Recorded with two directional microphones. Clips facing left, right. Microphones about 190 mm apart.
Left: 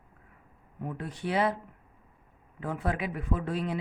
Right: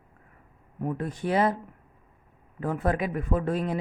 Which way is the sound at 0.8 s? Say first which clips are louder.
Right 5 dB; 45° right (ahead or behind).